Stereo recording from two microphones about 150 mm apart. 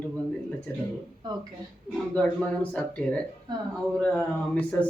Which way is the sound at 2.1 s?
10° left (ahead or behind).